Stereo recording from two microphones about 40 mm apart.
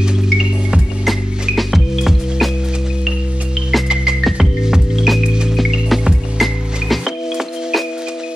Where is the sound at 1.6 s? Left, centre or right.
Centre.